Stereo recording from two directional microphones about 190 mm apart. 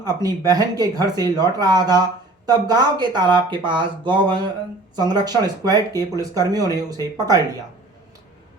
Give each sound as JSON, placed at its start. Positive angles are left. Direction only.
{"t": 0.0, "sound": "speech", "side_deg": -20}